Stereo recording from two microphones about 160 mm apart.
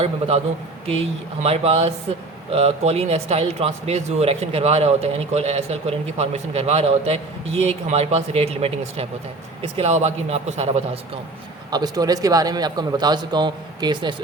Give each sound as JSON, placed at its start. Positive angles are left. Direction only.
{"t": 0.0, "sound": "speech", "side_deg": -40}
{"t": 11.7, "sound": "a man's voice", "side_deg": -25}